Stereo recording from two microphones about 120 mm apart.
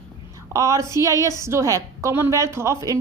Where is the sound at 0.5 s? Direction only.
25° right (ahead or behind).